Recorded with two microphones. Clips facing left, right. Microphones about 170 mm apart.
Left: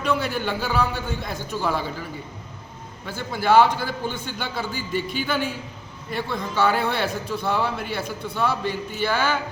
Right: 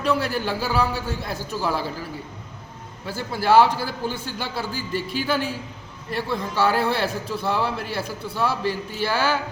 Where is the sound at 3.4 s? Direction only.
5° right (ahead or behind).